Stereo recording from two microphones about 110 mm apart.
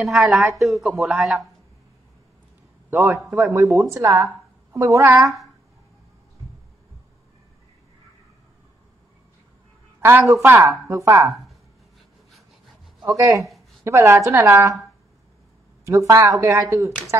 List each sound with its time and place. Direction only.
0.1 s speech: 10° right (ahead or behind)
0.6 s speech: centre (ahead or behind)
2.9 s a woman's voice: 20° right (ahead or behind)
9.9 s a sound: 20° right (ahead or behind)
10.2 s speech: 30° right (ahead or behind)
10.5 s a woman's voice: 20° right (ahead or behind)
13.0 s a woman's voice: 25° right (ahead or behind)
15.8 s a woman's voice: 30° right (ahead or behind)